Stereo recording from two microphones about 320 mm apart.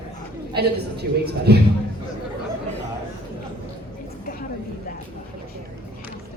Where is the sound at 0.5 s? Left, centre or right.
Right.